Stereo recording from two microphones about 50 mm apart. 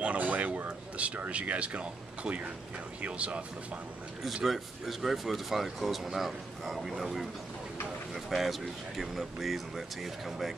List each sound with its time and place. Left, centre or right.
0.0 s speech: right
4.2 s speech: centre
8.3 s speech: centre